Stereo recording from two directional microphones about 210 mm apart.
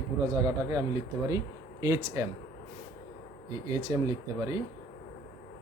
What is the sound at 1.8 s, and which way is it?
Speech, 15° right (ahead or behind).